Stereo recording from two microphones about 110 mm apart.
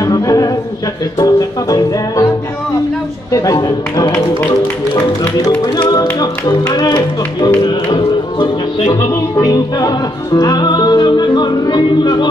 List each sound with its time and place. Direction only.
0.0 s a sound: 30° left (ahead or behind)
1.2 s music: 35° left (ahead or behind)
3.3 s speech: 30° left (ahead or behind)
5.8 s music: 40° left (ahead or behind)